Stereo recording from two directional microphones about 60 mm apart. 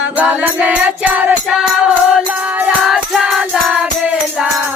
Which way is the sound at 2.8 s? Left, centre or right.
Centre.